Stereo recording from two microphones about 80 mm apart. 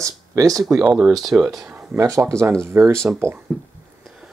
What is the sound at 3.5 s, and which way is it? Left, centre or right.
Speech, centre.